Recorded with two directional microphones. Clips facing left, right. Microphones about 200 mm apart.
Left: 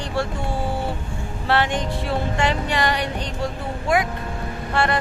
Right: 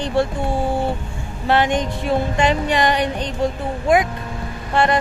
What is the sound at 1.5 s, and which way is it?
Speech, 15° right (ahead or behind).